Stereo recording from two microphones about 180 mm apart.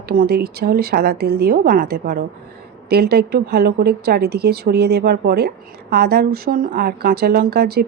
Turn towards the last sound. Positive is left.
turn(degrees=-60)  # may be behind; listen again after turning